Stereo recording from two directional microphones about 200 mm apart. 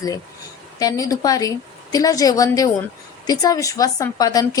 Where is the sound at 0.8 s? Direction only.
15° left (ahead or behind).